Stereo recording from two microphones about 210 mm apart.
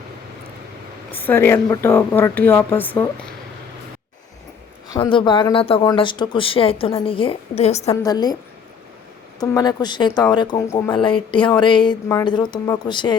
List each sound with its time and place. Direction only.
1.1 s speech: 10° left (ahead or behind)
4.9 s speech: 25° left (ahead or behind)
8.0 s speech: 20° left (ahead or behind)
9.4 s speech: 20° left (ahead or behind)